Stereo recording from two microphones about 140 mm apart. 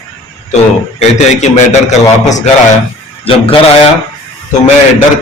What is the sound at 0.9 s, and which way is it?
A man's voice, 55° left (ahead or behind).